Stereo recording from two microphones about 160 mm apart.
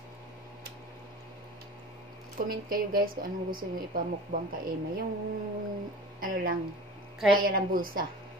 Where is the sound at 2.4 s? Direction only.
65° right (ahead or behind).